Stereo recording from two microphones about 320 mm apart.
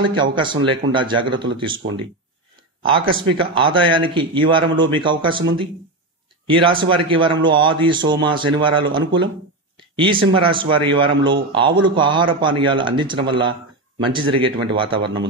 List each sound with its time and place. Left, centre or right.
0.0 s a man's voice: centre
3.3 s a man's voice: centre